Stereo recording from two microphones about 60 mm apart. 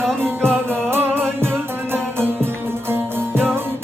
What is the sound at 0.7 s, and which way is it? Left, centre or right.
Music, right.